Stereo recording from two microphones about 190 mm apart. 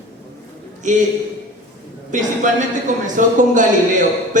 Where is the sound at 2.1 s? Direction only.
40° right (ahead or behind).